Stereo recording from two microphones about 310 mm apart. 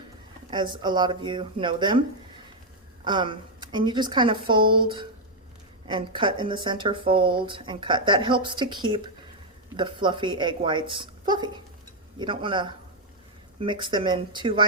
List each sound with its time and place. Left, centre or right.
0.5 s speech: centre